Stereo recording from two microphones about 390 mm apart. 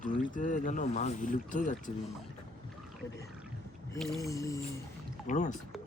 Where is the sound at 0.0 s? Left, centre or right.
Centre.